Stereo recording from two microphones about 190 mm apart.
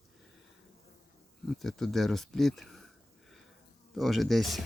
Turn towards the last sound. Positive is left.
turn(degrees=0)  # may be behind; listen again after turning